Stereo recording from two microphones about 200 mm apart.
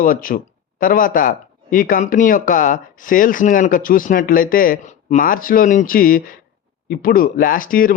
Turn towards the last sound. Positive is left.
turn(degrees=45)  # may be behind; listen again after turning